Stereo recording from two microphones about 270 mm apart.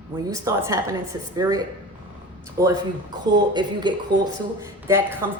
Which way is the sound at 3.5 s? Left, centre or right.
Centre.